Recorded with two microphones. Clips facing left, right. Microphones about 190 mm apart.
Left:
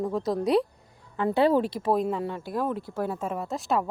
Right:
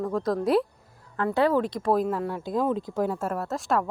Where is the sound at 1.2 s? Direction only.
25° left (ahead or behind).